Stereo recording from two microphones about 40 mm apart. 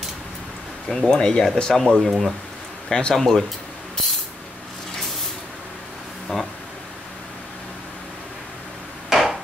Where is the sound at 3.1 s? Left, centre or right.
Centre.